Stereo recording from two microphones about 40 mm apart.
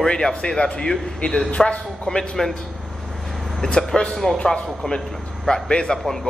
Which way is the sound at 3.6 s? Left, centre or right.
Centre.